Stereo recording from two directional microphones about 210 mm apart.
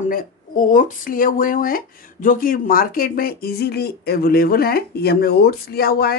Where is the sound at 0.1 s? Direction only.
40° left (ahead or behind).